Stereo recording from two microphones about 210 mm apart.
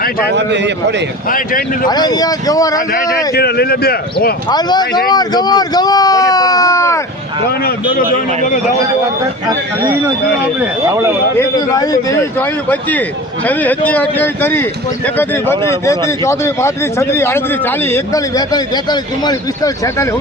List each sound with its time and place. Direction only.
0.3 s a man's voice: 55° right (ahead or behind)
1.9 s speech: 20° left (ahead or behind)
3.3 s speech: 50° left (ahead or behind)
4.4 s speech: 20° left (ahead or behind)
10.6 s speech: 10° right (ahead or behind)
11.3 s speech: 15° left (ahead or behind)